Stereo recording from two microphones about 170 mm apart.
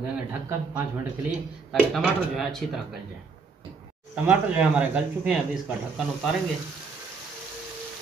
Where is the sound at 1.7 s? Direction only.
Centre (ahead or behind).